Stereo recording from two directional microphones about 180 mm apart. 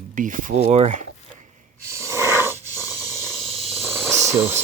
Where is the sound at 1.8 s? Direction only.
15° right (ahead or behind).